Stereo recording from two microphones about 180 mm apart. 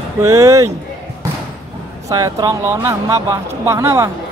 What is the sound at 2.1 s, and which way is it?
Speech, 20° right (ahead or behind).